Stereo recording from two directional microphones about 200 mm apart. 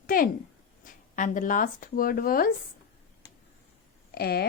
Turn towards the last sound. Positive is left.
turn(degrees=50)  # may be behind; listen again after turning